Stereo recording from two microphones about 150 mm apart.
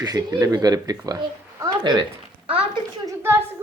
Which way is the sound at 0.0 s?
25° right (ahead or behind).